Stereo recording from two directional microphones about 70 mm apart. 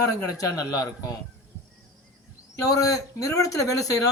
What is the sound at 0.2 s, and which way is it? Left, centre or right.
Speech, left.